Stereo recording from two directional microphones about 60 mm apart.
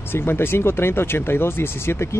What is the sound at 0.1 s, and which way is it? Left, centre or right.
Speech, left.